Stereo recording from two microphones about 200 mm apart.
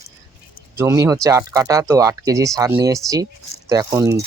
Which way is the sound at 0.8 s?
15° right (ahead or behind).